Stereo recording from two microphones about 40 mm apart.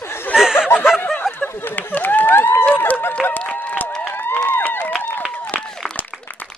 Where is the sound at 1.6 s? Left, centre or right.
Left.